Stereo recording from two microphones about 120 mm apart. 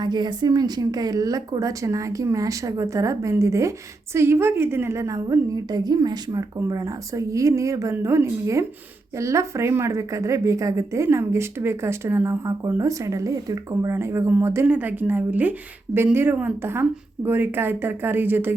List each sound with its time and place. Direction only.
0.0 s a woman's voice: 35° right (ahead or behind); by 18.5 s 15° right (ahead or behind)